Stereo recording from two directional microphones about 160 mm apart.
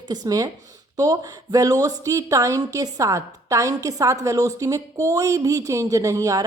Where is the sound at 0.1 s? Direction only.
25° right (ahead or behind).